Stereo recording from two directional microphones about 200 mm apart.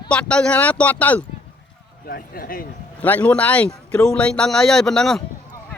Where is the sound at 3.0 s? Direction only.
10° left (ahead or behind).